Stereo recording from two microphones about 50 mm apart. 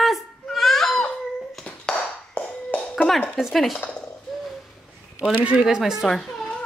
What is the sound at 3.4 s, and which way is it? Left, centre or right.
Speech, centre.